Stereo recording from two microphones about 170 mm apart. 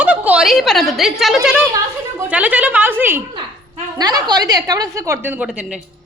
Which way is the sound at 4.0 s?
25° right (ahead or behind).